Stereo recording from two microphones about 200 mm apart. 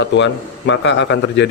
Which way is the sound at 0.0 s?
65° left (ahead or behind).